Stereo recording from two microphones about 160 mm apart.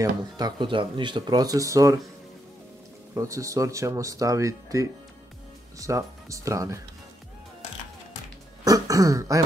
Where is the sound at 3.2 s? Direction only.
20° right (ahead or behind).